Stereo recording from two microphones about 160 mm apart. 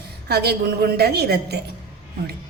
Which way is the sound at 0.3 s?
80° right.